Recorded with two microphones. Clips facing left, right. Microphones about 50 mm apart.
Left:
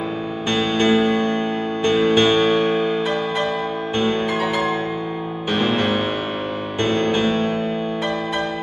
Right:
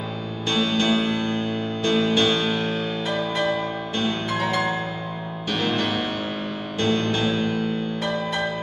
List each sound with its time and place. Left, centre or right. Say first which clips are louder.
0.5 s music: left 4 dB; left
4.3 s music: left 3 dB; centre
5.5 s music: left 4 dB; left